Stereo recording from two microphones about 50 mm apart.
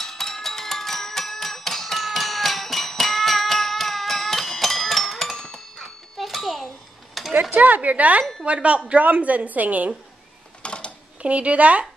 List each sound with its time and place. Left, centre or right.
0.0 s a sound: centre
5.4 s music: centre
7.2 s a sound: centre
7.5 s a woman's voice: right
10.6 s mechanisms: left
11.2 s a woman's voice: right